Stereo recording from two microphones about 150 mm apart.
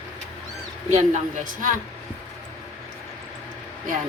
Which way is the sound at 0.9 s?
55° right (ahead or behind).